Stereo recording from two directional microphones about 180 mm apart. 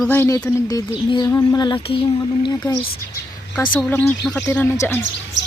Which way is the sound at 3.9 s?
10° left (ahead or behind).